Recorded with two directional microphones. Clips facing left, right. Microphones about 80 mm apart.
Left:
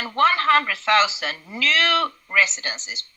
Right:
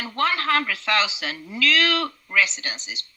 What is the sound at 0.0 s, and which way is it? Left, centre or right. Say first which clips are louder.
A woman's voice: left 5 dB; left.